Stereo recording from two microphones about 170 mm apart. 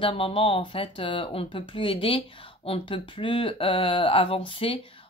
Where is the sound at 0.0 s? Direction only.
30° left (ahead or behind).